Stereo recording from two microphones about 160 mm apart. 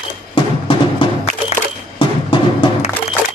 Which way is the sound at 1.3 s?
45° left (ahead or behind).